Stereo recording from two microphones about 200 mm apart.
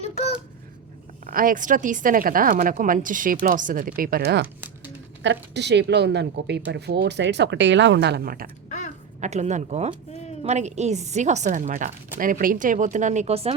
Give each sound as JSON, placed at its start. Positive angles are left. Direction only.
{"t": 0.0, "sound": "a sound", "side_deg": 30}
{"t": 1.3, "sound": "speech", "side_deg": -45}
{"t": 9.2, "sound": "a woman's voice", "side_deg": -35}